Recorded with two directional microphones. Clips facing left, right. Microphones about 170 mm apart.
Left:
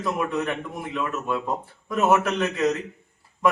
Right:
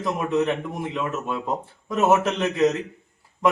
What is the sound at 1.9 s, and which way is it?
Speech, 25° right (ahead or behind).